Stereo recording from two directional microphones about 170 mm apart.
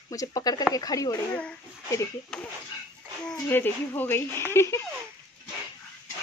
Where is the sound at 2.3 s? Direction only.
5° left (ahead or behind).